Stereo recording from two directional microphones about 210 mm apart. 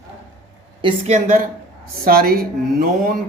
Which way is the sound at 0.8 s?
30° right (ahead or behind).